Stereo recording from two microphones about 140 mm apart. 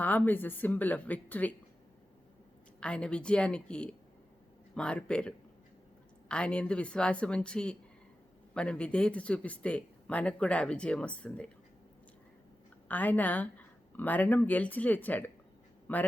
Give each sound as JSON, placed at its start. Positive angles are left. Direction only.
{"t": 0.0, "sound": "speech", "side_deg": 15}
{"t": 2.8, "sound": "speech", "side_deg": 5}
{"t": 12.9, "sound": "speech", "side_deg": 10}